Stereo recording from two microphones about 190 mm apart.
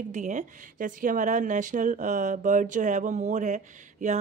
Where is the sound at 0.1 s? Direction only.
40° right (ahead or behind).